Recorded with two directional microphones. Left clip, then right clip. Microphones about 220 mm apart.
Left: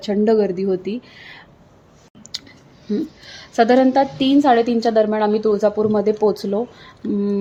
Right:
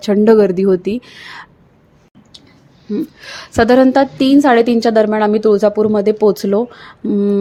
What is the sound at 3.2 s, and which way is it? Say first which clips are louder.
A woman's voice: right 3 dB; 25° right (ahead or behind).